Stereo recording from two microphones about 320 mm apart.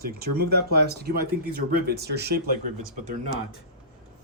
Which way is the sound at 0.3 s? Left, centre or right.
Right.